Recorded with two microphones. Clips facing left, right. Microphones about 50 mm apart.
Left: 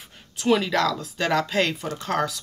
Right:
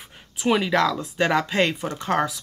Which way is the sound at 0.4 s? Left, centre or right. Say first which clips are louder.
Right 1 dB; centre.